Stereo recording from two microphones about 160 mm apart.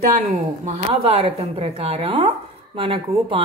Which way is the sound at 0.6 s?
40° right (ahead or behind).